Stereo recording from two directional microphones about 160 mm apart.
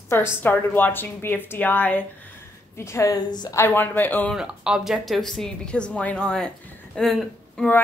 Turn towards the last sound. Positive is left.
turn(degrees=5)  # may be behind; listen again after turning